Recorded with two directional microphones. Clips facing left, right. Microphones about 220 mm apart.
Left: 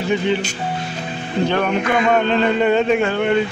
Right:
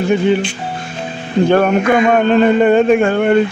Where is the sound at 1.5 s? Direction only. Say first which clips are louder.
Right 8 dB; 50° right (ahead or behind).